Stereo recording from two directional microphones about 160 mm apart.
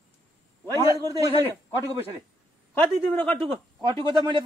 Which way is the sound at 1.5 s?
20° right (ahead or behind).